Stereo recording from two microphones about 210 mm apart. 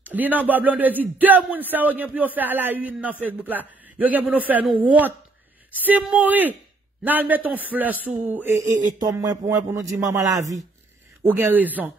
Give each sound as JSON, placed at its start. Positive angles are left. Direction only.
{"t": 0.0, "sound": "a man's voice", "side_deg": -10}